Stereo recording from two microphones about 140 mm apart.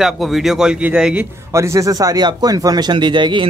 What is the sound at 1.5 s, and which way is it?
Speech, 20° right (ahead or behind).